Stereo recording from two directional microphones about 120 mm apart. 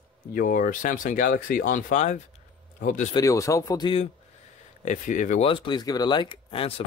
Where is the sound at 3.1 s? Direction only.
30° left (ahead or behind).